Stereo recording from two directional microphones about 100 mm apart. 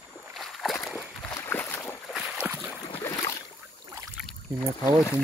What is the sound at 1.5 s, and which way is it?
Boat, 20° left (ahead or behind).